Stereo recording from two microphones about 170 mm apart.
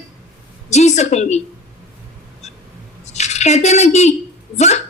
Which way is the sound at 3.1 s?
40° left (ahead or behind).